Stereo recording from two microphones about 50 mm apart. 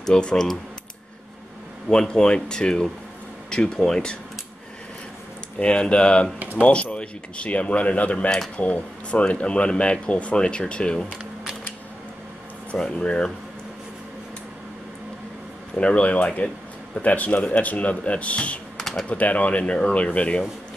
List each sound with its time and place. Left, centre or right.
0.0 s speech: centre
1.9 s speech: centre
5.6 s speech: left
12.7 s speech: centre
15.7 s speech: left
18.8 s typing: centre
19.0 s speech: left